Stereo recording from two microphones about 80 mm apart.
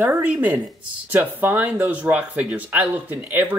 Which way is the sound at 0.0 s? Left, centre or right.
Right.